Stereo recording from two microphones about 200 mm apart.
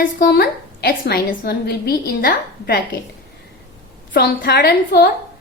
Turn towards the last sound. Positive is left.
turn(degrees=55)  # may be behind; listen again after turning